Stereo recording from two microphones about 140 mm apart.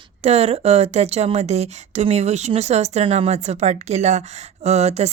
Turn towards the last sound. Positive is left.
turn(degrees=-50)  # may be behind; listen again after turning